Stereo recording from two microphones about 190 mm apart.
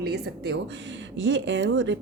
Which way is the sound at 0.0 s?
60° right (ahead or behind).